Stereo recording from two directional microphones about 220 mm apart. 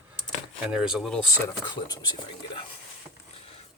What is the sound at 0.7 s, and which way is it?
Speech, 5° right (ahead or behind).